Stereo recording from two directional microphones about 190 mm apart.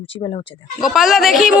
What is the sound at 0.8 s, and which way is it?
Speech, centre (ahead or behind).